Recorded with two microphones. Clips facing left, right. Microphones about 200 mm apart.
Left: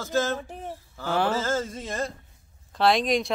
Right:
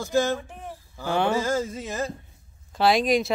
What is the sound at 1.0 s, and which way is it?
Speech, centre (ahead or behind).